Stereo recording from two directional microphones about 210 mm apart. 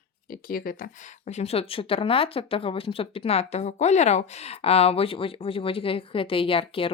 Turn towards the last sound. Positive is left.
turn(degrees=25)  # may be behind; listen again after turning